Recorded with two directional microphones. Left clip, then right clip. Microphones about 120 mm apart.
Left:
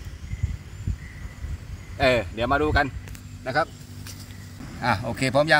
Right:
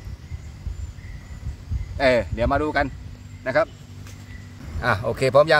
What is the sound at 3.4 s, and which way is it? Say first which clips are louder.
Speech: right 4 dB; 35° right (ahead or behind).